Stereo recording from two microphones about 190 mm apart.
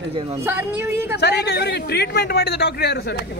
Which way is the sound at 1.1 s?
60° left (ahead or behind).